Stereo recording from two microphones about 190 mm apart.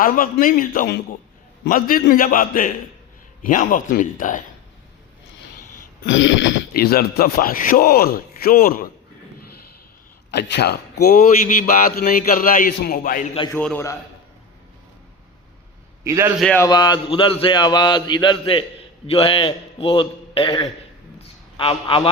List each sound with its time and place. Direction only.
0.0 s a man's voice: 45° left (ahead or behind)
6.1 s a man's voice: 75° left (ahead or behind); by 8.9 s 50° left (ahead or behind)
10.3 s a man's voice: 60° left (ahead or behind); by 13.2 s 45° left (ahead or behind)
13.5 s a man's voice: 5° left (ahead or behind)
16.0 s a man's voice: 15° right (ahead or behind)
16.4 s a man's voice: 5° left (ahead or behind)
16.6 s a man's voice: 20° left (ahead or behind)